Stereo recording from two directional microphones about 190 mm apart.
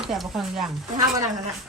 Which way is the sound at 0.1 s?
Centre (ahead or behind).